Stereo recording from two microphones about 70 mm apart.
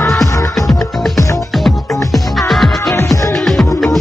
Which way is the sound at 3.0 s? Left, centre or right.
Left.